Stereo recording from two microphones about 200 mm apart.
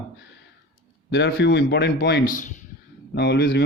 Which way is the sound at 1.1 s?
55° left (ahead or behind).